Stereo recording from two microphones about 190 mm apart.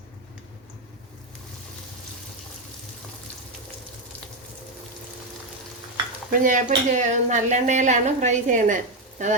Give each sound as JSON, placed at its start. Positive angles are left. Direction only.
{"t": 6.4, "sound": "a woman's voice", "side_deg": -45}